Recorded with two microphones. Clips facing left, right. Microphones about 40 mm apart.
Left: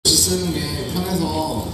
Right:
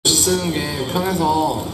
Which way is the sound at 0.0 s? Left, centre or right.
Right.